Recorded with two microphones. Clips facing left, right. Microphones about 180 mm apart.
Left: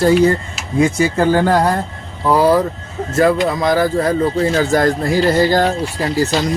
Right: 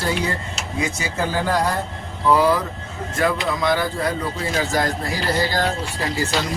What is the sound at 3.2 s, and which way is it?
Speech, 40° left (ahead or behind).